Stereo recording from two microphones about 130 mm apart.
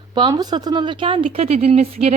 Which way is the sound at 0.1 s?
35° right (ahead or behind).